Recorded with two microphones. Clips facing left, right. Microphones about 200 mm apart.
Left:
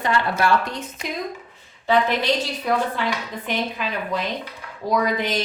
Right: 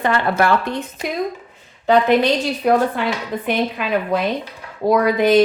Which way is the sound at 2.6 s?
65° right (ahead or behind).